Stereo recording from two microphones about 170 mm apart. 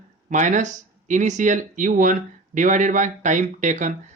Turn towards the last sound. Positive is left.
turn(degrees=-45)  # may be behind; listen again after turning